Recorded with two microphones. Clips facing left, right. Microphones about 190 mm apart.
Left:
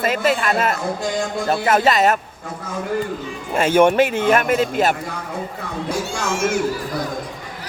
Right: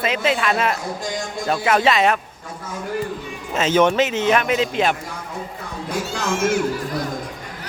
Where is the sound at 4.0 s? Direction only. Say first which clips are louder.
Left 2 dB; 55° left (ahead or behind).